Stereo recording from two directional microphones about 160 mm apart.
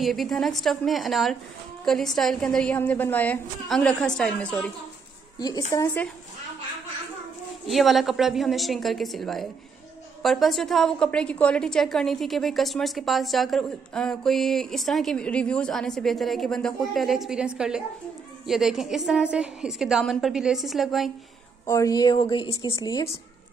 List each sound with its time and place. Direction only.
0.0 s a woman's voice: centre (ahead or behind)
5.4 s a woman's voice: 20° left (ahead or behind)
7.6 s a woman's voice: centre (ahead or behind)
21.6 s a woman's voice: 20° left (ahead or behind)